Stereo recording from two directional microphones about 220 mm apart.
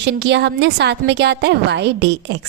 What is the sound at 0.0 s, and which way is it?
A woman's voice, 50° right (ahead or behind).